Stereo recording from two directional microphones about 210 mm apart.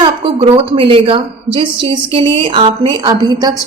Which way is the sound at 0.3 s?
25° right (ahead or behind).